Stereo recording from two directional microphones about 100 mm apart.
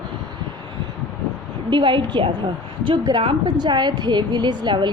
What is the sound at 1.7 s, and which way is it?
Speech, 50° right (ahead or behind).